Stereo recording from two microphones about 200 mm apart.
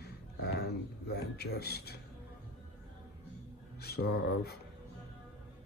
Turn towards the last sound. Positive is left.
turn(degrees=55)  # may be behind; listen again after turning